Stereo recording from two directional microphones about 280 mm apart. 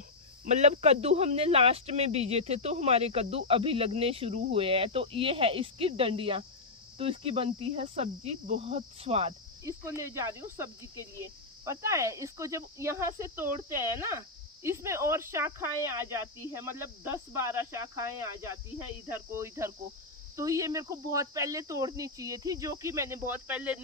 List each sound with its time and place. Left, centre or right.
0.5 s speech: right
9.8 s speech: centre